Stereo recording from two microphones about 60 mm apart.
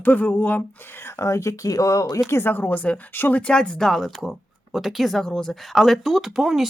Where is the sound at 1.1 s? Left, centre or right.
Left.